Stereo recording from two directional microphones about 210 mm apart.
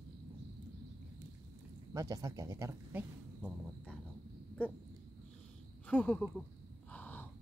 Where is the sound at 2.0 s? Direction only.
15° right (ahead or behind).